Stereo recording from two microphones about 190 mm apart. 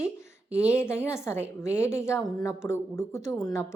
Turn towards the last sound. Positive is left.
turn(degrees=15)  # may be behind; listen again after turning